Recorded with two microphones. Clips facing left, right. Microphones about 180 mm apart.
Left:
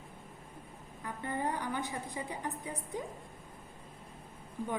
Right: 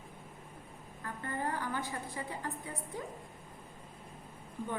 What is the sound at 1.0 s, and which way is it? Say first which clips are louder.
A woman's voice: left 2 dB; 15° left (ahead or behind).